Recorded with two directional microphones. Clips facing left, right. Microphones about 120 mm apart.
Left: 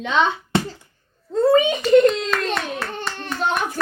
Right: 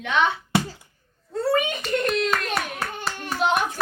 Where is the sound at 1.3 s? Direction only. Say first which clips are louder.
Left 7 dB; 20° left (ahead or behind).